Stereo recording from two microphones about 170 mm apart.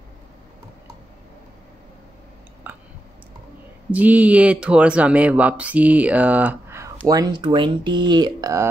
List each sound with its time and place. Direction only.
2.6 s a sound: 10° right (ahead or behind)
3.9 s speech: 10° right (ahead or behind)
7.1 s speech: 25° right (ahead or behind)